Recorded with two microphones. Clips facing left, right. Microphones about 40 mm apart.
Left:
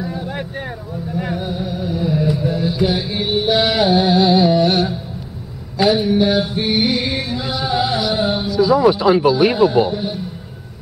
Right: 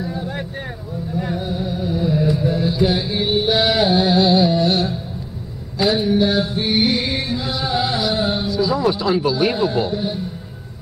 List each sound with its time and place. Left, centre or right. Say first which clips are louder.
0.0 s vehicle: left 1 dB; centre
1.3 s music: even; centre
3.9 s carnatic music: left 2 dB; centre
6.1 s music: left 2 dB; centre
8.1 s speech: left 2 dB; centre